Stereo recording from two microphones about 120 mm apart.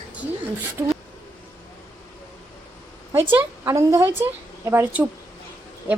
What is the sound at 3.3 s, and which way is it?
A woman's voice, 20° right (ahead or behind).